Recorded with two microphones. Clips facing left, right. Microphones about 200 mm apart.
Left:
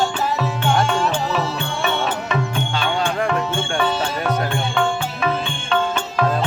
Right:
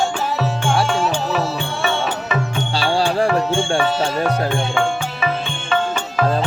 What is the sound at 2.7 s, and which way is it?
Music, 35° right (ahead or behind).